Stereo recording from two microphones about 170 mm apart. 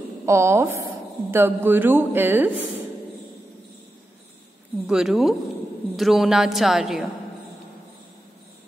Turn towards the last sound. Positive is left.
turn(degrees=0)  # may be behind; listen again after turning